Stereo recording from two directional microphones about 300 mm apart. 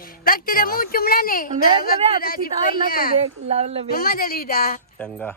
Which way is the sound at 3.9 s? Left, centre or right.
Left.